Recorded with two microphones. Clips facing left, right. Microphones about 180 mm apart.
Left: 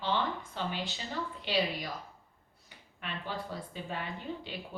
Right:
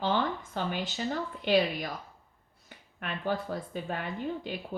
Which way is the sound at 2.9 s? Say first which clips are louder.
Right 7 dB; 50° right (ahead or behind).